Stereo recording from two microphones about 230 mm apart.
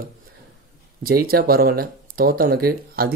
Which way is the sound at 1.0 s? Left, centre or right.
Right.